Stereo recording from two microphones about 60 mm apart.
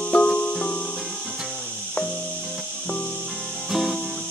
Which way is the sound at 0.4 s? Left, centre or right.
Centre.